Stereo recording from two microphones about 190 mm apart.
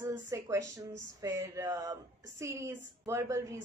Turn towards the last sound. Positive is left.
turn(degrees=-15)  # may be behind; listen again after turning